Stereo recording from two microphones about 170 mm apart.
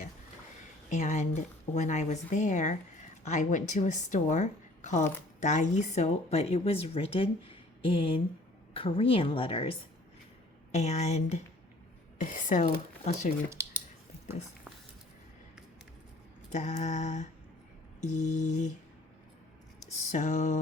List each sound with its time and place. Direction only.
0.9 s speech: 45° left (ahead or behind)
16.5 s speech: 45° left (ahead or behind)
20.0 s speech: 45° left (ahead or behind)